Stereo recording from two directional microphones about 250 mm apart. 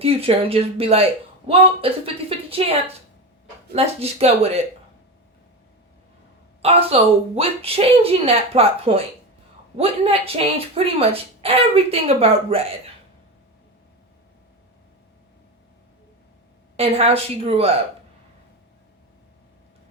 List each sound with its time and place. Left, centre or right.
0.0 s speech: right
3.8 s speech: right
6.6 s speech: right
16.7 s speech: right